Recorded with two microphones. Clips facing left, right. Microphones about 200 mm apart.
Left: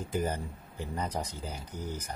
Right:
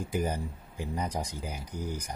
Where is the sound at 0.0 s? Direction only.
10° right (ahead or behind).